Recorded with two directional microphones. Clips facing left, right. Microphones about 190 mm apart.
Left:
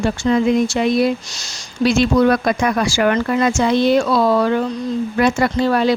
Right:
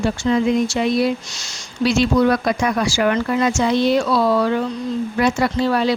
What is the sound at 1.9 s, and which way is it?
Speech, 50° left (ahead or behind).